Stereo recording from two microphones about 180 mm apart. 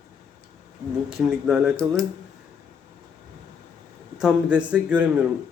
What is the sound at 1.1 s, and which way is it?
Speech, 5° right (ahead or behind).